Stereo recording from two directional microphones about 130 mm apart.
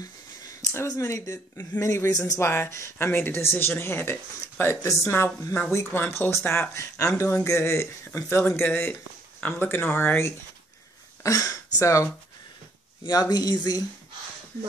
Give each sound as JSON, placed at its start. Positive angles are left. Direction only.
{"t": 0.6, "sound": "speech", "side_deg": 25}
{"t": 11.2, "sound": "speech", "side_deg": 25}